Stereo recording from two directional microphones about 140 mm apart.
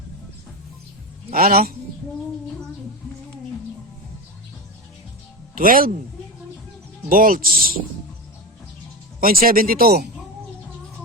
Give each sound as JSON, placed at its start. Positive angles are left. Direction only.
{"t": 1.3, "sound": "speech", "side_deg": -90}
{"t": 5.5, "sound": "speech", "side_deg": -90}
{"t": 7.1, "sound": "speech", "side_deg": -90}
{"t": 9.2, "sound": "speech", "side_deg": -90}